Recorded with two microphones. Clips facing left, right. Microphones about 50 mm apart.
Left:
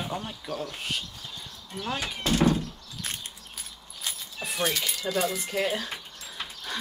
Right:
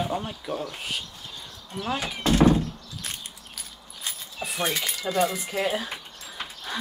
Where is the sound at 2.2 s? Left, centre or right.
Right.